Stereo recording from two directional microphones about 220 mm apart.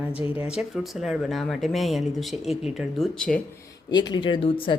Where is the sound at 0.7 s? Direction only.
Centre (ahead or behind).